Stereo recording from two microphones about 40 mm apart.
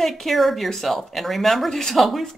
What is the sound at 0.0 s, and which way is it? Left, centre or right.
Speech, centre.